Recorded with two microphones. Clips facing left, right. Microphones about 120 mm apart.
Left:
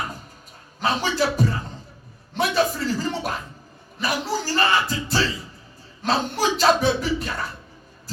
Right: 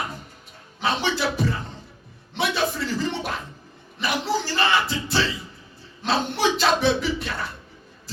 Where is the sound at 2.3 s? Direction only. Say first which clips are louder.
Left 3 dB; 40° left (ahead or behind).